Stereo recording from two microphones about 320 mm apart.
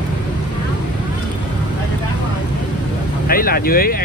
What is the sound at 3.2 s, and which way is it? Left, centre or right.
Speech, left.